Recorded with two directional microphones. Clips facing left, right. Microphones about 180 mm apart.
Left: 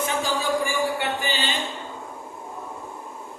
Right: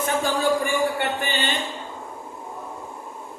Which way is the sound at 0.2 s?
55° right (ahead or behind).